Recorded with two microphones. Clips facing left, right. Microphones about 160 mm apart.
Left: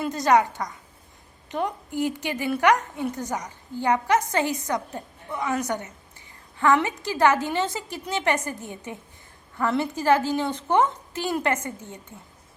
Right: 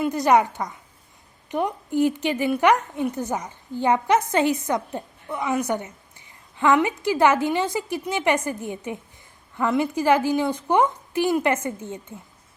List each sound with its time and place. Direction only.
0.3 s a woman's voice: 15° right (ahead or behind)